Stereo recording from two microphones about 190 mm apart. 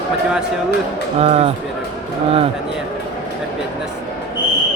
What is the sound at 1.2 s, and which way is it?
Speech, 30° right (ahead or behind).